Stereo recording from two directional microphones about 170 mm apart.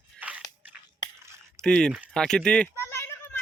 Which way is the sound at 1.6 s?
5° left (ahead or behind).